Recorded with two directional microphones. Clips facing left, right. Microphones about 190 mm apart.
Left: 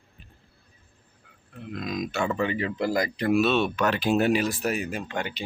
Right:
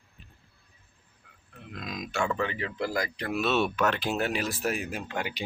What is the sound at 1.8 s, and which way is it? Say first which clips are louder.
Speech: left 3 dB; centre (ahead or behind).